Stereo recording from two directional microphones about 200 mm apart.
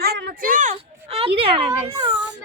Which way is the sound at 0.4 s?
40° right (ahead or behind).